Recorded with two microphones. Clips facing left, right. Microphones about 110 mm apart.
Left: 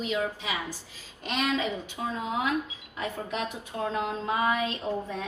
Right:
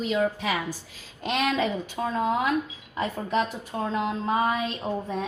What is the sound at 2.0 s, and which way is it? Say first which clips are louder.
Speech: right 4 dB; 80° right.